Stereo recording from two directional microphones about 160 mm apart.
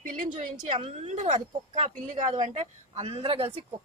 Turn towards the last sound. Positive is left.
turn(degrees=-35)  # may be behind; listen again after turning